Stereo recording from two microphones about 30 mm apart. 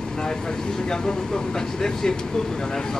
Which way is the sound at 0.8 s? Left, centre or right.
Left.